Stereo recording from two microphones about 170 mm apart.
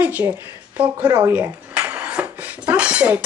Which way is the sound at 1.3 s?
10° right (ahead or behind).